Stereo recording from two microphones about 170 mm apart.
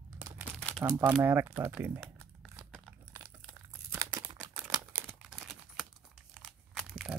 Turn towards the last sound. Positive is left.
turn(degrees=0)  # may be behind; listen again after turning